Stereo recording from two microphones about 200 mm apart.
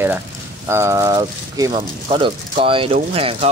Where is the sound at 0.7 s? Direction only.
15° right (ahead or behind).